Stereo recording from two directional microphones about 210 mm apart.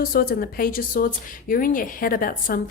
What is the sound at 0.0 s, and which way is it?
Speech, 45° left (ahead or behind).